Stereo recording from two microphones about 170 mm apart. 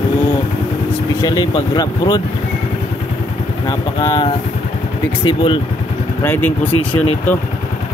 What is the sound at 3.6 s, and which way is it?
Speech, 25° left (ahead or behind).